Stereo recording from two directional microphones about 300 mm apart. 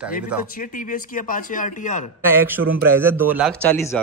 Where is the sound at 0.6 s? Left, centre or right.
Left.